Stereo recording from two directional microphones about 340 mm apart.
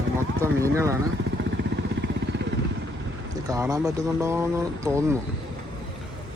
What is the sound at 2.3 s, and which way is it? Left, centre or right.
Vehicle, right.